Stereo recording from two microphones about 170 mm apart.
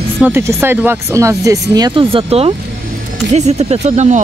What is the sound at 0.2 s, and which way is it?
Speech, 15° right (ahead or behind).